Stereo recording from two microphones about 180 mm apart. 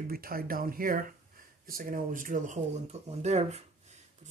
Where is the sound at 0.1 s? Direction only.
55° right (ahead or behind).